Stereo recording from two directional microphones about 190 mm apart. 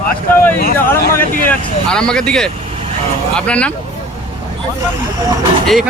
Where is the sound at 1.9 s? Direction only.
5° left (ahead or behind).